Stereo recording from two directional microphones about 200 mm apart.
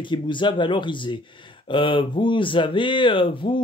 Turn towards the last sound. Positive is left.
turn(degrees=25)  # may be behind; listen again after turning